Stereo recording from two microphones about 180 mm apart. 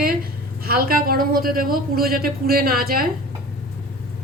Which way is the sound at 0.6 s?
55° right (ahead or behind).